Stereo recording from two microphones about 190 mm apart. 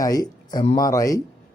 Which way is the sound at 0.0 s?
20° left (ahead or behind).